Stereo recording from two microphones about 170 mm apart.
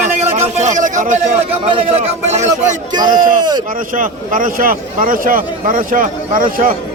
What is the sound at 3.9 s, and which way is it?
Speech, 55° right (ahead or behind).